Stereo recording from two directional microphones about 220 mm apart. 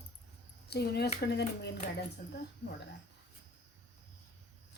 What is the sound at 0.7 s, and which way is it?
Speech, 45° left (ahead or behind).